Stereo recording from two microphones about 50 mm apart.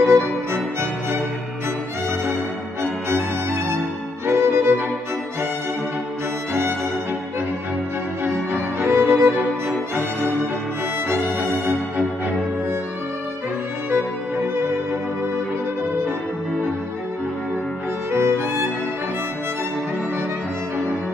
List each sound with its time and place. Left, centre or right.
0.0 s music: right
3.1 s music: right
4.3 s violin: right
8.8 s violin: right
11.1 s violin: right
18.1 s violin: right